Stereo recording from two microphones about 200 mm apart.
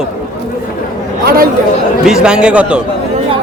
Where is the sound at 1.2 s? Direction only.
45° right (ahead or behind).